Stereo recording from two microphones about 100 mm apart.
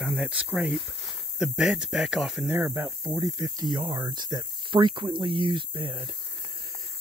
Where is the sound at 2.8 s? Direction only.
30° right (ahead or behind); by 6.1 s 65° right (ahead or behind).